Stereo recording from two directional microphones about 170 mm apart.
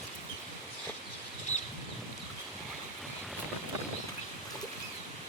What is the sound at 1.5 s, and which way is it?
Bird flight, 45° left (ahead or behind).